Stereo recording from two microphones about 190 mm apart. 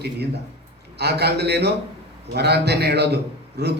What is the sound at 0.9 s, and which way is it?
A man's voice, 60° right (ahead or behind).